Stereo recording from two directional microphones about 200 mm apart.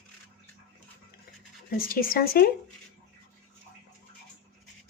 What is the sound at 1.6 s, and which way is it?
Speech, 45° left (ahead or behind).